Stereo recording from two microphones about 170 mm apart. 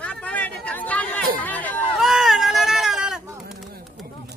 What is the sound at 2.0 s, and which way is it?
Goat, centre (ahead or behind).